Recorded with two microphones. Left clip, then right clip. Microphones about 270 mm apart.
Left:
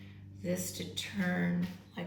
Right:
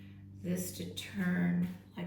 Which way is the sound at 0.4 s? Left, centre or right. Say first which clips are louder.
Left 3 dB; centre.